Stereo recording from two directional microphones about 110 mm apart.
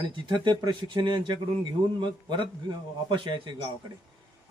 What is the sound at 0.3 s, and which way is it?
Speech, 40° right (ahead or behind).